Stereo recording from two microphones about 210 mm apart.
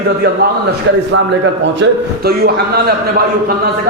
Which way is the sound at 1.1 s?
60° right (ahead or behind).